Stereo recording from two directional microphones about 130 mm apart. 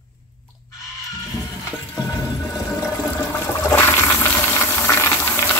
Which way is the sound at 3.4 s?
20° left (ahead or behind).